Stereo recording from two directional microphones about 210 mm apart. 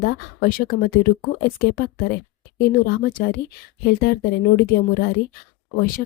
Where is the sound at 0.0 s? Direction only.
45° left (ahead or behind).